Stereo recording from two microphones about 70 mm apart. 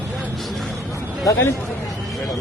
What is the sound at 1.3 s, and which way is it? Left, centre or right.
Speech, left.